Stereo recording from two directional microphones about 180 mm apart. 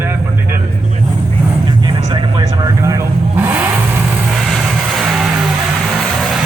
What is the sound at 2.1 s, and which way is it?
Vehicle, 20° right (ahead or behind).